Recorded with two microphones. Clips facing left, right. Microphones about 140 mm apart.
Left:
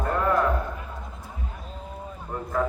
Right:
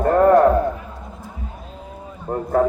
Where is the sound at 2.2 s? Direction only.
45° right (ahead or behind).